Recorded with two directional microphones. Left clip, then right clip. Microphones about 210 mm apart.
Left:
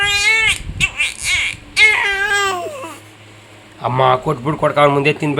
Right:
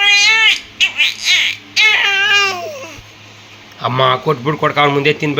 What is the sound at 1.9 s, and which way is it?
Baby cry, 20° left (ahead or behind).